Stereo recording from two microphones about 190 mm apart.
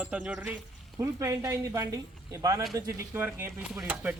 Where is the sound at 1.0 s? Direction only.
15° right (ahead or behind).